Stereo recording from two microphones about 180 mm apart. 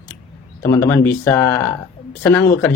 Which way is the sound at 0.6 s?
15° left (ahead or behind).